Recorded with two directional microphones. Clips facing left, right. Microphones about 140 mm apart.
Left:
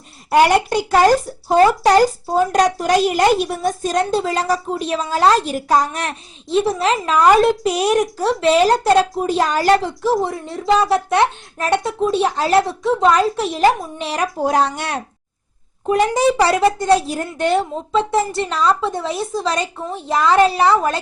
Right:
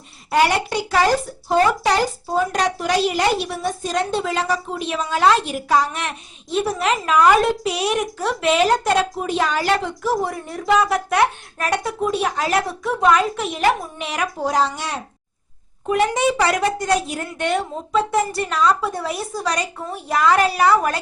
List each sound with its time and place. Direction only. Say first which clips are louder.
0.3 s a woman's voice: left 4 dB; 45° left (ahead or behind)
10.0 s speech: left 3 dB; 25° left (ahead or behind)
14.4 s speech: left 3 dB; 60° left (ahead or behind)
15.9 s speech: left 3 dB; 35° left (ahead or behind)